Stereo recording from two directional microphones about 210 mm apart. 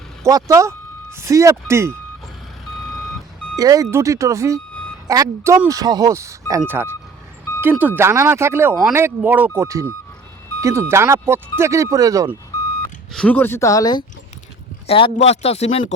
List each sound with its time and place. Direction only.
0.3 s speech: 15° right (ahead or behind)
3.6 s speech: 15° right (ahead or behind)
13.1 s speech: 5° left (ahead or behind); by 16.0 s 30° left (ahead or behind)